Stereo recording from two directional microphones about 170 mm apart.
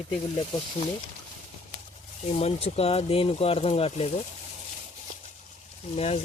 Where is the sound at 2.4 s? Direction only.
35° left (ahead or behind).